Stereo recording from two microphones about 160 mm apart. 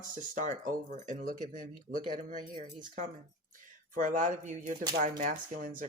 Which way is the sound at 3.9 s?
55° right (ahead or behind).